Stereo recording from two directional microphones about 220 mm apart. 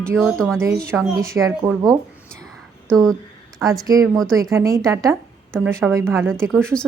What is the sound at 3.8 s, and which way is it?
A woman's voice, 15° right (ahead or behind).